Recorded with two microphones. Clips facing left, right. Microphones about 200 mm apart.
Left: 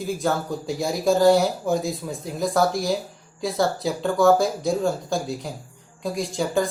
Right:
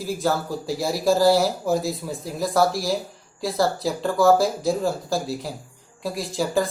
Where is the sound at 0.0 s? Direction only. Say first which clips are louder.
Even; centre (ahead or behind).